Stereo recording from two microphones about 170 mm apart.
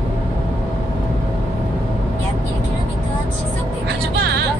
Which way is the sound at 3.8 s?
75° right (ahead or behind).